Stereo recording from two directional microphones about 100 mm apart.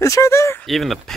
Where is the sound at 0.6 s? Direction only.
Centre (ahead or behind).